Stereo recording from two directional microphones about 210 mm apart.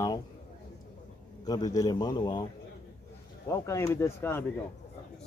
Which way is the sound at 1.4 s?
20° left (ahead or behind).